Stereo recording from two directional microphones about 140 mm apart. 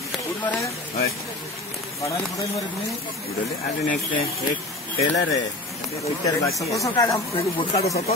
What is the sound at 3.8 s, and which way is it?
Speech, 70° left (ahead or behind).